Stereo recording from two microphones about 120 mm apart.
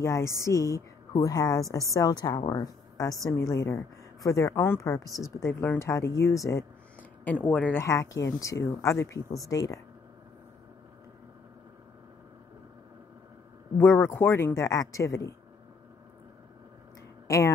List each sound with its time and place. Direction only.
0.0 s a woman's voice: 25° left (ahead or behind)
5.5 s speech: 15° left (ahead or behind)
7.0 s speech: 15° left (ahead or behind)
7.8 s speech: 25° left (ahead or behind)
13.7 s speech: 20° left (ahead or behind)